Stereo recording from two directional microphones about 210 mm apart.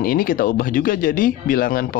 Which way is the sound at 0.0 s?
45° left (ahead or behind).